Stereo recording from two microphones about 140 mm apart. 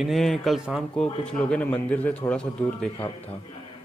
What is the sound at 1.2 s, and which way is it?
A man's voice, 10° left (ahead or behind).